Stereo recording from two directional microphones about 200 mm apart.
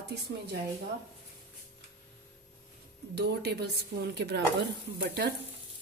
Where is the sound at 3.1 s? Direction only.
55° right (ahead or behind).